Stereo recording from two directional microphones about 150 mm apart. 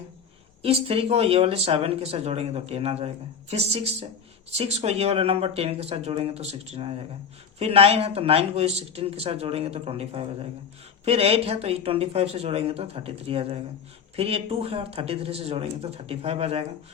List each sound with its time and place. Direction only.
0.6 s speech: 40° right (ahead or behind)